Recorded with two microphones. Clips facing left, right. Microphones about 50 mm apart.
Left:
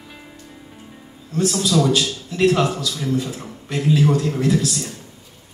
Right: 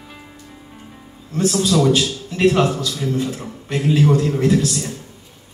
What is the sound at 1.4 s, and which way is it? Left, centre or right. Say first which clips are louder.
A man's voice: right 2 dB; right.